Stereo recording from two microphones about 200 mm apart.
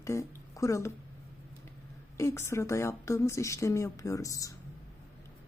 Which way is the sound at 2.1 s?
15° left (ahead or behind).